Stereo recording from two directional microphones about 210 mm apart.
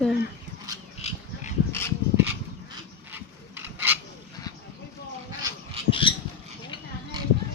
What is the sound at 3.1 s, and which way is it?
Rub, 10° right (ahead or behind).